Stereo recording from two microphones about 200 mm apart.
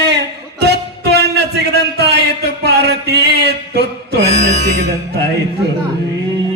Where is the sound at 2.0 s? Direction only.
55° right (ahead or behind).